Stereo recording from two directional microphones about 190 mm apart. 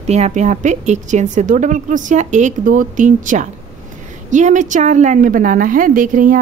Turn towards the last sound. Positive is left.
turn(degrees=-45)  # may be behind; listen again after turning